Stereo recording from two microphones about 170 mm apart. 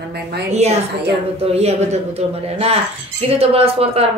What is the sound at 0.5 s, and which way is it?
A woman's voice, 40° right (ahead or behind).